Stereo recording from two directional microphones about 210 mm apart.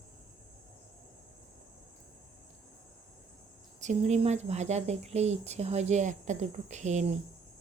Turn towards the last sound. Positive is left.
turn(degrees=-35)  # may be behind; listen again after turning